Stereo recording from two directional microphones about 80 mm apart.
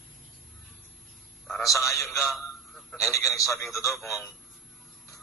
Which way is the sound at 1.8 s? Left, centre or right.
Centre.